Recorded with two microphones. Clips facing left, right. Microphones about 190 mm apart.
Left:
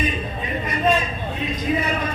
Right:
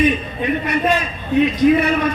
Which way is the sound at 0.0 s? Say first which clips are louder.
Right 8 dB; 70° right (ahead or behind).